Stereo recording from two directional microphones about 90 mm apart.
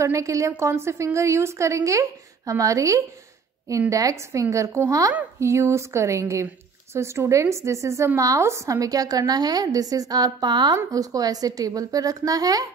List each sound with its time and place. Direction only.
0.0 s a woman's voice: 35° right (ahead or behind); by 10.8 s 55° right (ahead or behind)
10.9 s a woman's voice: 45° right (ahead or behind)